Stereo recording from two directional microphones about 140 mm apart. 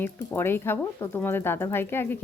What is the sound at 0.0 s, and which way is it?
A woman's voice, 15° left (ahead or behind).